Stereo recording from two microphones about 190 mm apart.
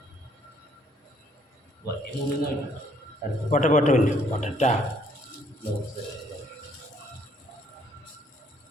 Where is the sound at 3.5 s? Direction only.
40° left (ahead or behind).